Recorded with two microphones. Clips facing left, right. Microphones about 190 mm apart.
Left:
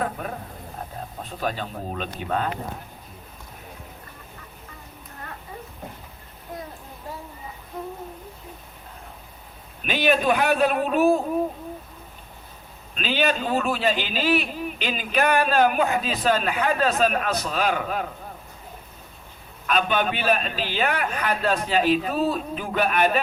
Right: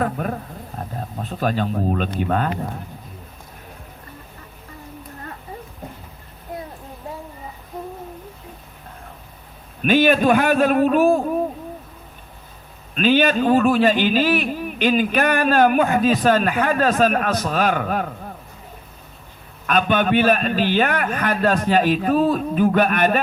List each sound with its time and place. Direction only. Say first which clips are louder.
0.0 s a sound: right 5 dB; 50° right (ahead or behind)
0.8 s a man's voice: right 5 dB; 45° right (ahead or behind)
9.8 s a man's voice: right 6 dB; 50° right (ahead or behind)
13.0 s a man's voice: right 7 dB; 50° right (ahead or behind)
19.6 s a man's voice: right 4 dB; 50° right (ahead or behind)